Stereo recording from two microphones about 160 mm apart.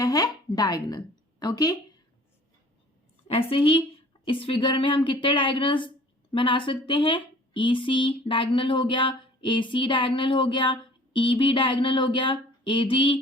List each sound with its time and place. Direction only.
0.0 s a woman's voice: 25° left (ahead or behind)
3.5 s speech: 35° left (ahead or behind)